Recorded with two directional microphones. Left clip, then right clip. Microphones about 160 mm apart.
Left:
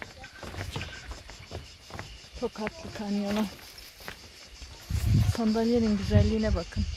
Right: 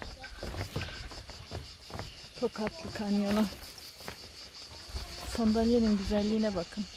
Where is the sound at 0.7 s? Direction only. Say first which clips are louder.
Left 2 dB; 40° left (ahead or behind).